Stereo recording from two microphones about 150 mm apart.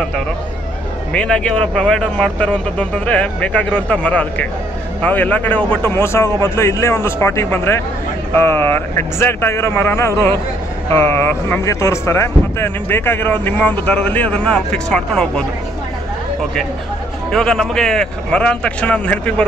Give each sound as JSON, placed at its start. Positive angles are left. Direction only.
{"t": 1.1, "sound": "speech", "side_deg": 5}
{"t": 17.3, "sound": "speech", "side_deg": 5}